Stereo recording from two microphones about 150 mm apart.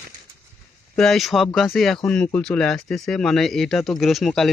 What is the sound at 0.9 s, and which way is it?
Speech, centre (ahead or behind).